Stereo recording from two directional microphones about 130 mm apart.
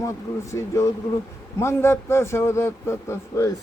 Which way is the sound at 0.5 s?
25° left (ahead or behind).